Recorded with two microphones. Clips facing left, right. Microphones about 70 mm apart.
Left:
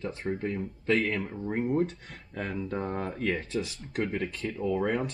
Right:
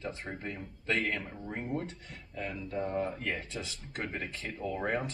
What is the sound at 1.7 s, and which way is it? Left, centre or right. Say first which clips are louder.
Speech: left 9 dB; left.